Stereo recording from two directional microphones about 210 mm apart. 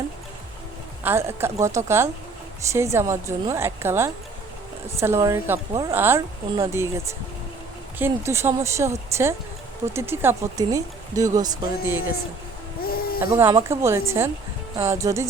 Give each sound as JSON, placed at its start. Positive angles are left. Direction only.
{"t": 1.0, "sound": "speech", "side_deg": -10}
{"t": 12.8, "sound": "a sound", "side_deg": 45}
{"t": 13.1, "sound": "speech", "side_deg": -10}